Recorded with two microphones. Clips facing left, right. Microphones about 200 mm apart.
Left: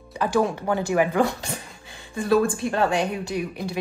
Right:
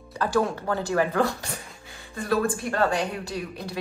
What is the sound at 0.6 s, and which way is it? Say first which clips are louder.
A woman's voice: left 3 dB; 15° left (ahead or behind).